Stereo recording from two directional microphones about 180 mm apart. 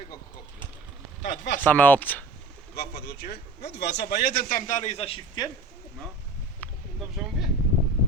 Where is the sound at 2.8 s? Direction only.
65° left (ahead or behind); by 5.5 s 25° left (ahead or behind).